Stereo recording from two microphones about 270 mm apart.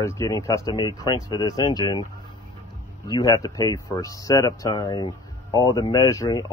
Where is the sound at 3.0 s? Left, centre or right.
Centre.